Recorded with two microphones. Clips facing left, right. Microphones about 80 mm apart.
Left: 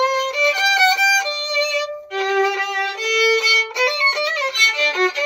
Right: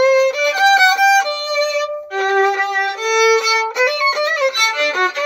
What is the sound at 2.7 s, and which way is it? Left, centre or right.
Violin, right.